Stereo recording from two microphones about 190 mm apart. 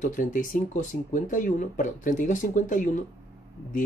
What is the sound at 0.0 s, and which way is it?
Speech, 45° left (ahead or behind).